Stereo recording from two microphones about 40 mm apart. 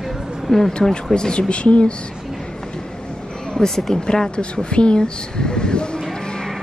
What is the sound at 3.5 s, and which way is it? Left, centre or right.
A woman's voice, centre.